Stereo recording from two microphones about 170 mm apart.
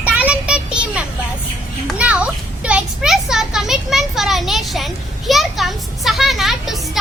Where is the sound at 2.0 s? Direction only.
5° right (ahead or behind).